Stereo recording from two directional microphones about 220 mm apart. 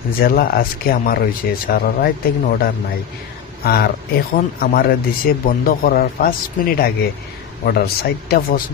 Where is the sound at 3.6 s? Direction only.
45° left (ahead or behind).